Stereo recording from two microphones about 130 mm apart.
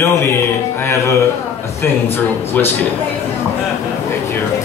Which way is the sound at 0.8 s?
20° left (ahead or behind).